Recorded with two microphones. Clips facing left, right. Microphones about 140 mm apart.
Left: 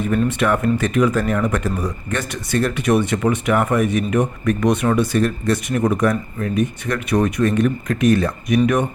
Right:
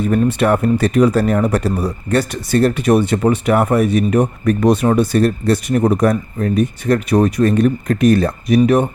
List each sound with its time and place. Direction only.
0.0 s speech: 40° right (ahead or behind)